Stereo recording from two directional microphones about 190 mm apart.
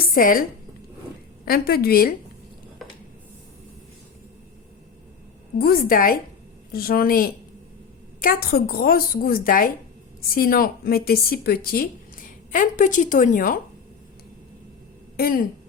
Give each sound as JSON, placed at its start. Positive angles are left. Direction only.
{"t": 0.0, "sound": "a woman's voice", "side_deg": 50}
{"t": 1.5, "sound": "a woman's voice", "side_deg": 55}
{"t": 5.5, "sound": "a woman's voice", "side_deg": 55}
{"t": 15.1, "sound": "speech", "side_deg": 50}